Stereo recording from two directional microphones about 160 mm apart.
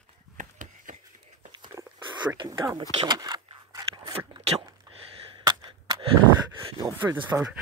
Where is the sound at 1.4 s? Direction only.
30° right (ahead or behind).